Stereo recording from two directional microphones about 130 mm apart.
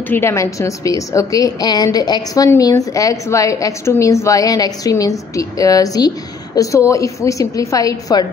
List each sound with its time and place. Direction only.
0.1 s a woman's voice: 20° left (ahead or behind)